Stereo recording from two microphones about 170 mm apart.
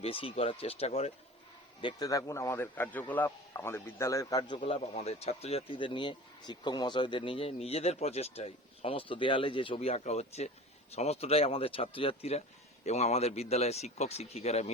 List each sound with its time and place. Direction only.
0.0 s speech: 30° left (ahead or behind)
1.8 s speech: 25° left (ahead or behind)